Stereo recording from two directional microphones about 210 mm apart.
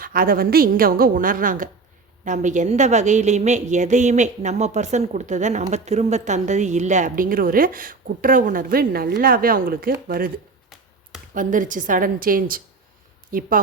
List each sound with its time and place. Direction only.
0.0 s a woman's voice: 45° right (ahead or behind)